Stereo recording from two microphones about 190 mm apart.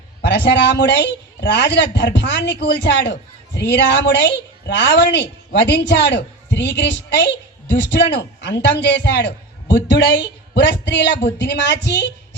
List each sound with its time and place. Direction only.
0.2 s a woman's voice: 65° left (ahead or behind)